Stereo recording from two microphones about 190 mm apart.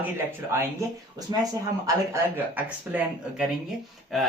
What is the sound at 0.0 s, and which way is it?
Speech, 10° right (ahead or behind).